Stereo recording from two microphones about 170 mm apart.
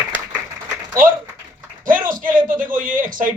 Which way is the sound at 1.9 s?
55° right (ahead or behind).